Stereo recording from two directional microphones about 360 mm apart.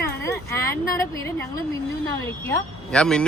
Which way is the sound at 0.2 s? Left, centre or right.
Centre.